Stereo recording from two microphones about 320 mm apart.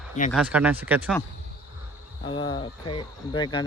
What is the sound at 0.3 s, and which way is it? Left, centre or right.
Speech, centre.